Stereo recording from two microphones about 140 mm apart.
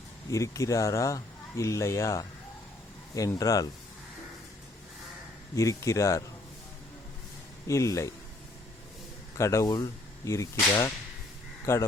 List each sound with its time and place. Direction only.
0.3 s speech: 20° left (ahead or behind)
5.5 s speech: 20° left (ahead or behind)
7.7 s speech: 20° left (ahead or behind)
9.4 s speech: 20° left (ahead or behind)
11.6 s speech: 20° left (ahead or behind)